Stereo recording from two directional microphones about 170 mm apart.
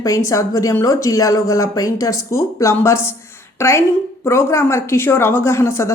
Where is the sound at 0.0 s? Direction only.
20° left (ahead or behind).